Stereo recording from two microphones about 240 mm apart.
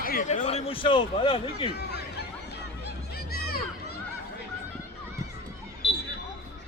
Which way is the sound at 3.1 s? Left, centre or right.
Left.